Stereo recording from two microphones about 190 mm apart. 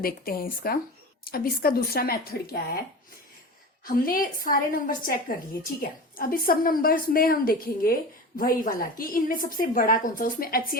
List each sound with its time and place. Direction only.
0.0 s a woman's voice: 50° left (ahead or behind)
3.8 s a woman's voice: 50° left (ahead or behind)